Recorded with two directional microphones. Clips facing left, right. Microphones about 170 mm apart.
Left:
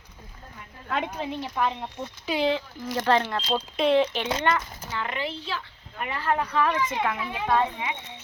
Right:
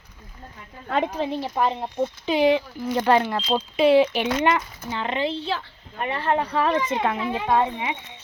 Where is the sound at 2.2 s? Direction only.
15° right (ahead or behind).